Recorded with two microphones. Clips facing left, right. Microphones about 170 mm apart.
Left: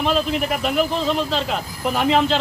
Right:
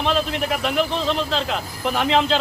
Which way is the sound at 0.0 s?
Centre (ahead or behind).